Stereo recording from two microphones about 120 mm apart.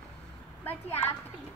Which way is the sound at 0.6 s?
20° left (ahead or behind).